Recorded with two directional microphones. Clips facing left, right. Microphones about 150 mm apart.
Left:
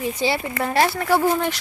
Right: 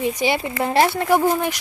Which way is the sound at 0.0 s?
15° right (ahead or behind).